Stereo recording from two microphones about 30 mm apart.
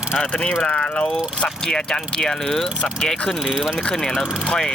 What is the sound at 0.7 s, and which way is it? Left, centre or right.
Speech, left.